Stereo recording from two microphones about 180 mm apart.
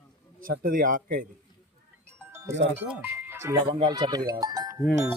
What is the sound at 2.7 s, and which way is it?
Speech, 10° right (ahead or behind).